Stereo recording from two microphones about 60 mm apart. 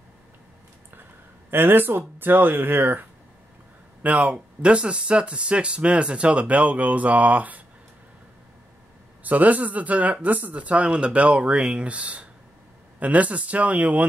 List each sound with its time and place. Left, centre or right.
1.5 s speech: right
9.2 s speech: right